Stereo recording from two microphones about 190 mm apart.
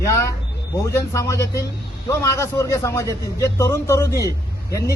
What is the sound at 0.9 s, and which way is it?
Speech, 15° left (ahead or behind).